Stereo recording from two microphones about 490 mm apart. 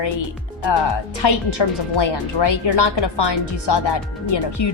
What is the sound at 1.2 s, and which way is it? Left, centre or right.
Speech, left.